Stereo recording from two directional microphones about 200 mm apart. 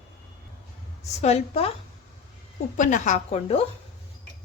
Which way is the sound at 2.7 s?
40° left (ahead or behind).